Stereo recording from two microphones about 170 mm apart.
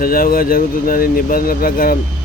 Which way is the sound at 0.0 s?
60° left (ahead or behind).